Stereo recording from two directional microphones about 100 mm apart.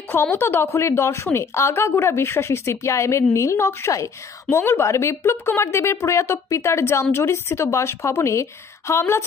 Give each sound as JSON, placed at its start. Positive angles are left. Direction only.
{"t": 0.1, "sound": "speech", "side_deg": 20}